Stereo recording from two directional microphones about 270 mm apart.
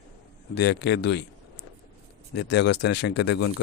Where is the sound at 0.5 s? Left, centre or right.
Left.